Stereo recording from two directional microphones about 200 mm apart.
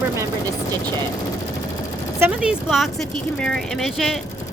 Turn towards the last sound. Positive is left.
turn(degrees=0)  # may be behind; listen again after turning